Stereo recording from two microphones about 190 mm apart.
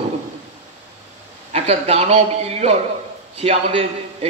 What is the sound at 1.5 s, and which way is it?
A man's voice, 35° right (ahead or behind).